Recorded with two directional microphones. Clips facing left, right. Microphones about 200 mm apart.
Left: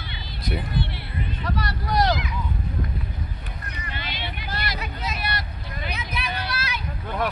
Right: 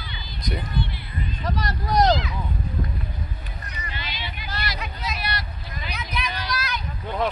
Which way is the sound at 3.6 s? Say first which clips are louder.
Left 1 dB; 55° left (ahead or behind).